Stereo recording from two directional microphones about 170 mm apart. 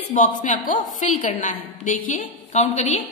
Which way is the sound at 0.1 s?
50° left (ahead or behind).